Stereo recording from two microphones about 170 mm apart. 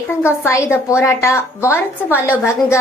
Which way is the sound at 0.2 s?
15° left (ahead or behind).